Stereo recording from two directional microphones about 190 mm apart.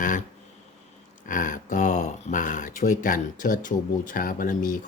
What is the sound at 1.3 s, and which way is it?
Speech, 45° left (ahead or behind).